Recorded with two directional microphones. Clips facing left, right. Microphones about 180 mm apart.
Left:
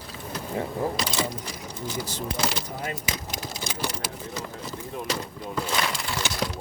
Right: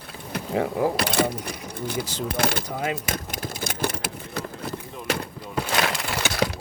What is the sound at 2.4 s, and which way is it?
Speech, 55° right (ahead or behind).